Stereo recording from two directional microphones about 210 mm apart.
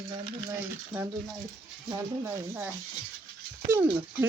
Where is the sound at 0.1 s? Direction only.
15° right (ahead or behind).